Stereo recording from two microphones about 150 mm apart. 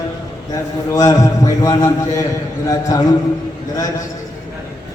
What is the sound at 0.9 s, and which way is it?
A man's voice, 25° left (ahead or behind).